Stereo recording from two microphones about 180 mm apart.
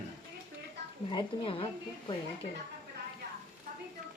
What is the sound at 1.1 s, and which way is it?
Speech, 30° left (ahead or behind).